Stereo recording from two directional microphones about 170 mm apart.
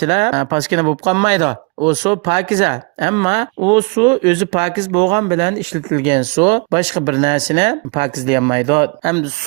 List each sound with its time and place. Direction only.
0.0 s speech: 40° right (ahead or behind)